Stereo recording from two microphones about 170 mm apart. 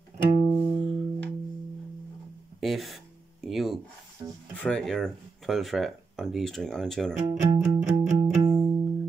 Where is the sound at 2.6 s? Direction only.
Centre (ahead or behind).